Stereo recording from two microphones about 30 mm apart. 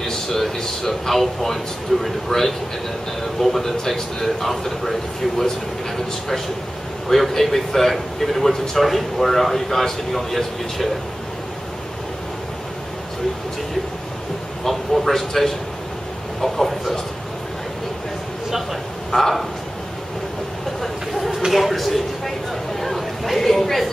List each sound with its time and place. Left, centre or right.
0.0 s a man's voice: centre
7.1 s a man's voice: centre
14.6 s a man's voice: centre
19.1 s a man's voice: centre
20.8 s vehicle: centre
21.5 s a man's voice: centre
22.8 s a sound: centre